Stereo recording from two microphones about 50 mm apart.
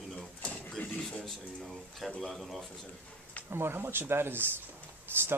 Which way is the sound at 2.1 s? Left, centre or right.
Centre.